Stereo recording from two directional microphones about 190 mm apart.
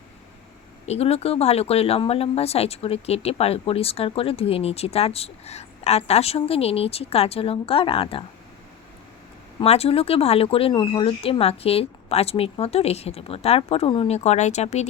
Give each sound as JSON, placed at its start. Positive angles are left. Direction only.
{"t": 0.9, "sound": "speech", "side_deg": 30}
{"t": 9.6, "sound": "speech", "side_deg": 30}